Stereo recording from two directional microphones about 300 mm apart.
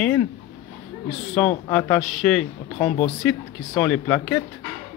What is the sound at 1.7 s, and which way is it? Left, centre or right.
Speech, centre.